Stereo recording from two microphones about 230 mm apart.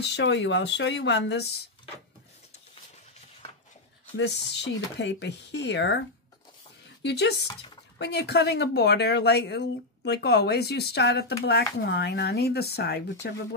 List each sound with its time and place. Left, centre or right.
0.1 s speech: left
4.2 s speech: left
7.0 s speech: left